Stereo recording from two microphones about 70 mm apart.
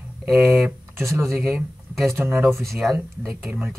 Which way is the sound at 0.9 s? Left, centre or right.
Right.